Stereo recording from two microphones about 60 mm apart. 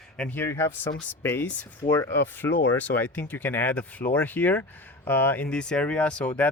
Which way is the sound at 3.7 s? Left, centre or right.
Left.